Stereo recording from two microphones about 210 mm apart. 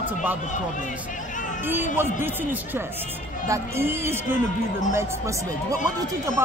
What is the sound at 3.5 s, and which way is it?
Speech, 10° right (ahead or behind).